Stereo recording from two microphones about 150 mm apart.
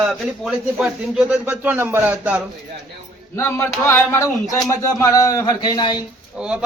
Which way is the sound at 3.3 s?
15° left (ahead or behind).